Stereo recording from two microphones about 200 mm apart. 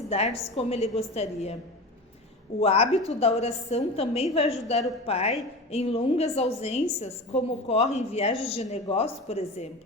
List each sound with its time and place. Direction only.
0.1 s a woman's voice: 30° left (ahead or behind)
2.6 s a woman's voice: 30° left (ahead or behind)